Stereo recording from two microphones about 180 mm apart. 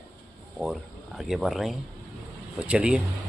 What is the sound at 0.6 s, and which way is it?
Speech, centre (ahead or behind).